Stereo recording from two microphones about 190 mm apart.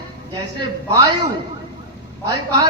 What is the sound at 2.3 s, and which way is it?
Speech, 25° right (ahead or behind).